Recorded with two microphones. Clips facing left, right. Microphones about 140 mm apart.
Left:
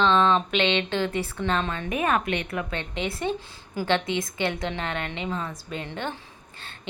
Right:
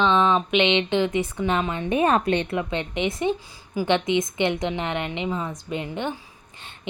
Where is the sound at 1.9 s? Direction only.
30° right (ahead or behind).